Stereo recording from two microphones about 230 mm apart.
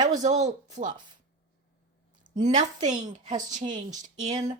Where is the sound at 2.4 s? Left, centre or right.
Right.